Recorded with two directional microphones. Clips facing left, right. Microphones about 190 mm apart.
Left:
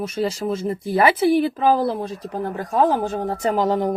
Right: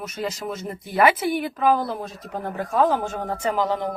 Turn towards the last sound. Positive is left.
turn(degrees=40)  # may be behind; listen again after turning